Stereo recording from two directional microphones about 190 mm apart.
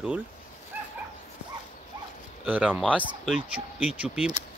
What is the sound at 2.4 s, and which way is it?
Speech, 10° right (ahead or behind).